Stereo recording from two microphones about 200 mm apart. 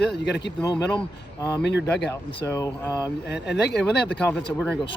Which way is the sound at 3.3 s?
60° left (ahead or behind).